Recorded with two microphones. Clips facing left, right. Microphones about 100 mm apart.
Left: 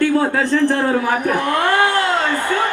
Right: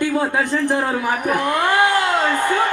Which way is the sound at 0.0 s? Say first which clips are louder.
Left 3 dB; 15° right (ahead or behind).